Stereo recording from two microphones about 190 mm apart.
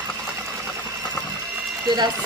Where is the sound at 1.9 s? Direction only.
20° right (ahead or behind).